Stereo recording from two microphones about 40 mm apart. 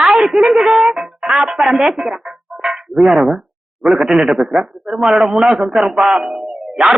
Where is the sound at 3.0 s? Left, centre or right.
Centre.